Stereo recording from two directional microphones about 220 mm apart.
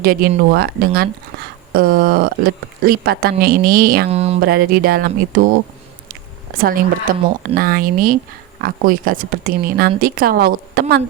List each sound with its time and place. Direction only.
0.0 s speech: 40° right (ahead or behind)
4.1 s speech: 30° right (ahead or behind)
4.4 s speech: 45° right (ahead or behind)
6.6 s speech: 40° right (ahead or behind)